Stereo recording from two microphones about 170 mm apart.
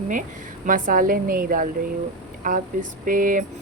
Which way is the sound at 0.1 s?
50° right (ahead or behind).